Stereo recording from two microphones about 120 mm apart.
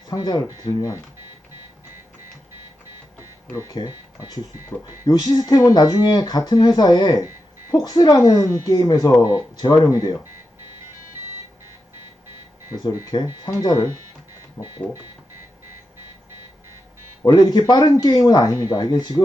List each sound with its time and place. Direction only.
0.1 s speech: 35° left (ahead or behind)
3.7 s speech: 30° left (ahead or behind)
5.0 s speech: 35° left (ahead or behind)
13.4 s speech: 35° left (ahead or behind)
17.2 s speech: 35° left (ahead or behind)